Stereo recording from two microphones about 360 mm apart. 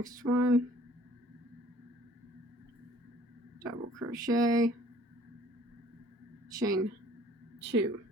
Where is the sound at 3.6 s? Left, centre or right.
Centre.